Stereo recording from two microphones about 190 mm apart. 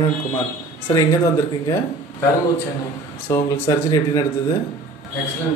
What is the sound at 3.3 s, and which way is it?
Speech, 20° left (ahead or behind).